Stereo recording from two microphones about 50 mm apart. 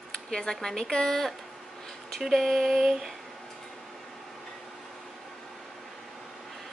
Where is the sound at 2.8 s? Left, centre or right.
Centre.